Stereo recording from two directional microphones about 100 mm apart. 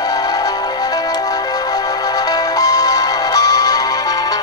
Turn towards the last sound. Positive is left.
turn(degrees=40)  # may be behind; listen again after turning